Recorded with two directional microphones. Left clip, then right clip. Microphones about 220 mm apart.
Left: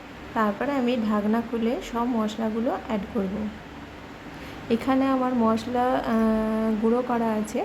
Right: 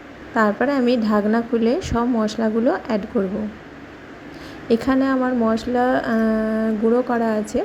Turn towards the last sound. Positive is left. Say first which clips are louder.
# right 5 dB
turn(degrees=-15)  # may be behind; listen again after turning